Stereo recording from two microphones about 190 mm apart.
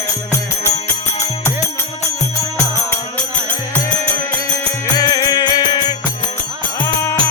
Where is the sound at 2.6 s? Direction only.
15° left (ahead or behind).